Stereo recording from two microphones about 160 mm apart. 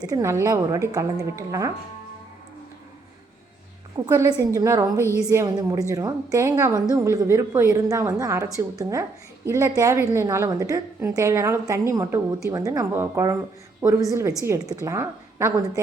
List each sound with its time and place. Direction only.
0.0 s a woman's voice: 20° right (ahead or behind)
3.9 s a woman's voice: 25° right (ahead or behind)